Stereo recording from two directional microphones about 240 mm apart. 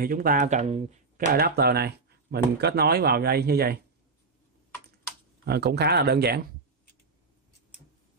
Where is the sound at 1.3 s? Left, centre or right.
Right.